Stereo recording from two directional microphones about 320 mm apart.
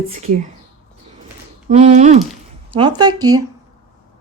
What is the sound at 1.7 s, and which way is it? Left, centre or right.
Speech, right.